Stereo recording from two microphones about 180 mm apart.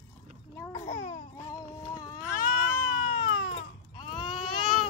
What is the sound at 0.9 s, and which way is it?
Babbling, 40° left (ahead or behind).